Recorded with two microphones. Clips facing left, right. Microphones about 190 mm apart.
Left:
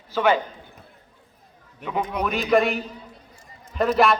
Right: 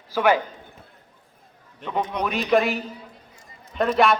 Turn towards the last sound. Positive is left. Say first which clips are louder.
# even
turn(degrees=0)  # may be behind; listen again after turning